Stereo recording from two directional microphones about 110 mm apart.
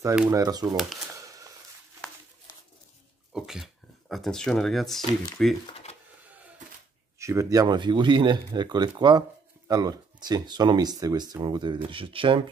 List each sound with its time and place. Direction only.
0.3 s speech: 35° right (ahead or behind)
1.1 s a sound: 30° right (ahead or behind)
3.3 s speech: 5° right (ahead or behind)
7.2 s speech: 30° right (ahead or behind)
7.6 s speech: 45° right (ahead or behind)